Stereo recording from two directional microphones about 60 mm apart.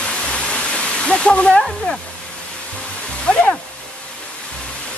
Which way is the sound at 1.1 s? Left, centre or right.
Centre.